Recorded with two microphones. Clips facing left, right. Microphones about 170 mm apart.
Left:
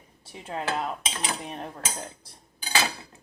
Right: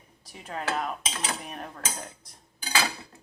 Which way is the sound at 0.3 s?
30° left (ahead or behind).